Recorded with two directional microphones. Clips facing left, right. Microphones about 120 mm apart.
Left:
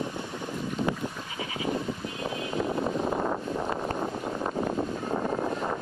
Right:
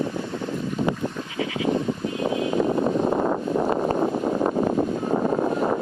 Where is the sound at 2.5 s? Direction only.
65° right (ahead or behind); by 3.9 s 50° right (ahead or behind).